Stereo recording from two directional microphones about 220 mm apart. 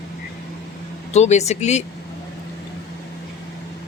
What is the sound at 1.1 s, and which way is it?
Speech, 30° left (ahead or behind).